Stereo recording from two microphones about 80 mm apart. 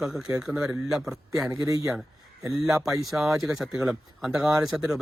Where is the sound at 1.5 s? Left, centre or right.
Right.